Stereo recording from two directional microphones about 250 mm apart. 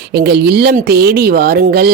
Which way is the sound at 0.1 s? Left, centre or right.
Right.